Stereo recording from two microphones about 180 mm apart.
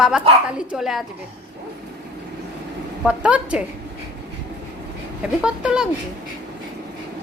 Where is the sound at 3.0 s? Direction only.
5° right (ahead or behind).